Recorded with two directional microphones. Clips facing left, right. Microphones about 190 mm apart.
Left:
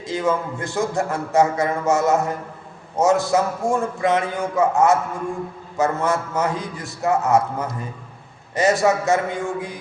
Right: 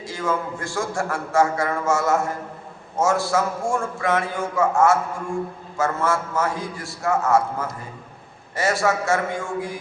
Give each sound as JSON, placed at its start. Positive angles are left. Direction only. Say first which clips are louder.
{"t": 0.0, "sound": "a man's voice", "louder": "left 3 dB", "side_deg": 20}